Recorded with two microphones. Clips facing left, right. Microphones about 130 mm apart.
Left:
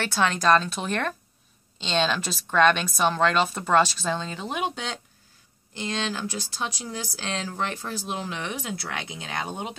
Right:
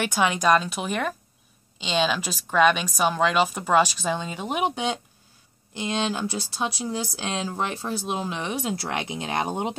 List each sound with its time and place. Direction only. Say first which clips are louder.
0.0 s speech: right 1 dB; 10° right (ahead or behind)